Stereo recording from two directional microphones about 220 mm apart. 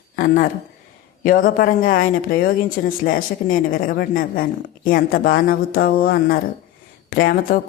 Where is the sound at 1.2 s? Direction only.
40° left (ahead or behind).